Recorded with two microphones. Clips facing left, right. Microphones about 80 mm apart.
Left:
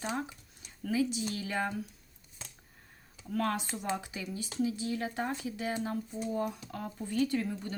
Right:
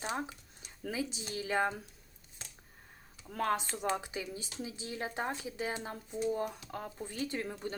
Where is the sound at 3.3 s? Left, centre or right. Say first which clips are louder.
Left 1 dB; right.